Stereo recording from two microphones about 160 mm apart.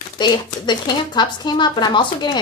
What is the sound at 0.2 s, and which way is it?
Speech, 25° left (ahead or behind).